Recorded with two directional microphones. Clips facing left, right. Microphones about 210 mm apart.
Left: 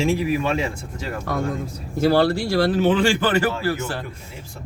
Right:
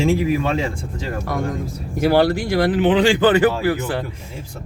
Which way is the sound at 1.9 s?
15° right (ahead or behind).